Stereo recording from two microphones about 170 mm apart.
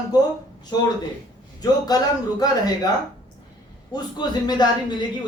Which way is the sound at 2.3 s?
20° left (ahead or behind).